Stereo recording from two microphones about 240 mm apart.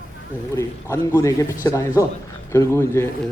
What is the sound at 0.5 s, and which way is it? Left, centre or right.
A man's voice, centre.